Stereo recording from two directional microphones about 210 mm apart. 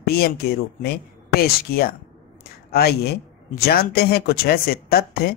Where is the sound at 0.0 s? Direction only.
45° left (ahead or behind).